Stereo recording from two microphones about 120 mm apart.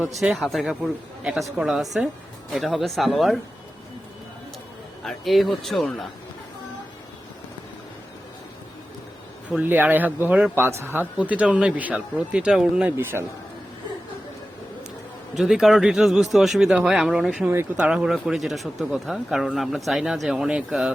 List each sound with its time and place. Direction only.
0.2 s a man's voice: centre (ahead or behind)
5.0 s a man's voice: centre (ahead or behind)
9.5 s speech: 10° right (ahead or behind)
13.0 s a man's voice: 20° right (ahead or behind)
15.4 s a man's voice: 5° right (ahead or behind)